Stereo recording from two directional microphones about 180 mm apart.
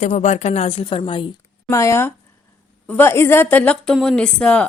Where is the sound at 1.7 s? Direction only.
15° left (ahead or behind).